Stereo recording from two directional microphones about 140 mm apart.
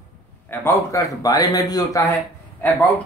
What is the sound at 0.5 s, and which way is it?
Speech, 20° left (ahead or behind).